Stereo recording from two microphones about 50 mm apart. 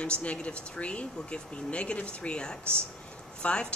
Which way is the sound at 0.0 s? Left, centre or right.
Left.